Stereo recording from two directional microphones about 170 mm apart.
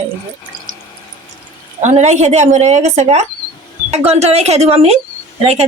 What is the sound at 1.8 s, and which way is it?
A woman's voice, 45° right (ahead or behind).